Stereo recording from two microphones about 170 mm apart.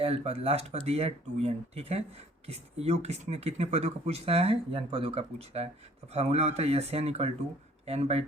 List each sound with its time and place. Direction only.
0.0 s speech: 35° right (ahead or behind)